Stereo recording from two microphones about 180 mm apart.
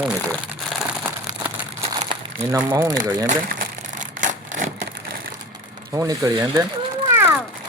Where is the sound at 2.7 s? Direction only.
20° right (ahead or behind).